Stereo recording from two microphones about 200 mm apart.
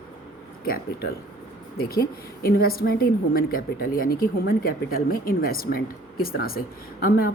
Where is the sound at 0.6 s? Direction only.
50° left (ahead or behind).